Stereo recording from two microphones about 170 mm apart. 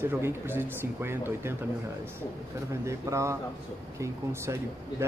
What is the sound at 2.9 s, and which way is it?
Speech, 15° right (ahead or behind).